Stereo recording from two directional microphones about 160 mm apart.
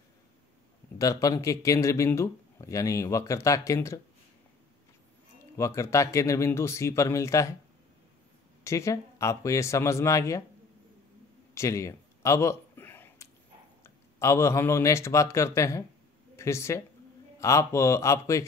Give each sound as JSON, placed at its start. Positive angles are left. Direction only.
{"t": 0.9, "sound": "speech", "side_deg": 20}
{"t": 5.6, "sound": "speech", "side_deg": 20}
{"t": 8.6, "sound": "speech", "side_deg": 20}
{"t": 11.5, "sound": "a sound", "side_deg": 20}
{"t": 13.8, "sound": "speech", "side_deg": 20}